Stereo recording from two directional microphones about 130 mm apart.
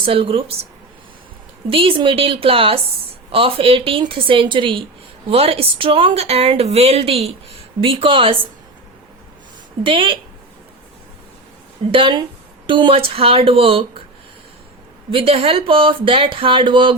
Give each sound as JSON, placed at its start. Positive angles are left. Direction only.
{"t": 0.0, "sound": "a woman's voice", "side_deg": -45}
{"t": 1.7, "sound": "a woman's voice", "side_deg": -45}
{"t": 5.3, "sound": "a woman's voice", "side_deg": -50}
{"t": 9.8, "sound": "a woman's voice", "side_deg": -40}
{"t": 11.9, "sound": "a woman's voice", "side_deg": -40}
{"t": 15.1, "sound": "a woman's voice", "side_deg": -45}